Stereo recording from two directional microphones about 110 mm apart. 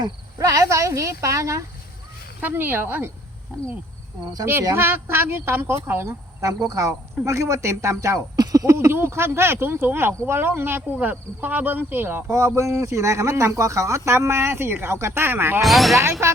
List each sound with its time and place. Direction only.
0.0 s speech: 30° right (ahead or behind)
2.4 s speech: 20° right (ahead or behind)
4.7 s speech: 20° right (ahead or behind)
15.6 s speech: centre (ahead or behind)
16.2 s speech: 25° right (ahead or behind)